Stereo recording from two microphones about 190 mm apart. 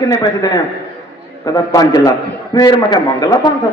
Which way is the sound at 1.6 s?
20° left (ahead or behind).